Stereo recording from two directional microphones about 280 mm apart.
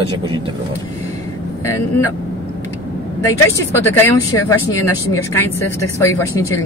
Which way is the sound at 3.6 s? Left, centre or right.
Centre.